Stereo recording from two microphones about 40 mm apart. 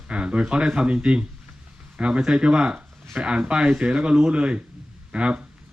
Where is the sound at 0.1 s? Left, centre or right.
Right.